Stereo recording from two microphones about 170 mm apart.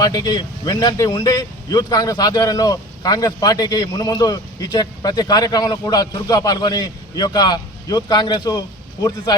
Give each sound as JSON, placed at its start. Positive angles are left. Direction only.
{"t": 0.0, "sound": "speech", "side_deg": 25}